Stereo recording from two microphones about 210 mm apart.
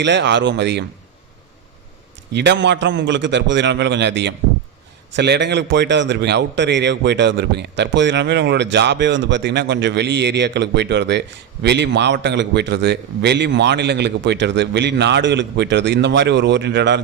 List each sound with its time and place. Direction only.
0.0 s a man's voice: 55° right (ahead or behind)
2.3 s a man's voice: 55° right (ahead or behind)